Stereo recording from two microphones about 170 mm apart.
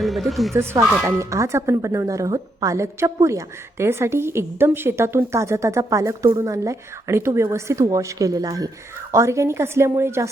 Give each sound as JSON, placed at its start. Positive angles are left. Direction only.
{"t": 0.0, "sound": "speech", "side_deg": 0}
{"t": 0.5, "sound": "speech", "side_deg": -15}